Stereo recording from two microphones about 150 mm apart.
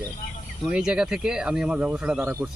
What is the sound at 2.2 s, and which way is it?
Speech, 15° right (ahead or behind).